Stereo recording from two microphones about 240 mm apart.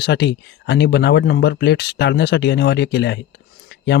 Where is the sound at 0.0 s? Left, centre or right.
Left.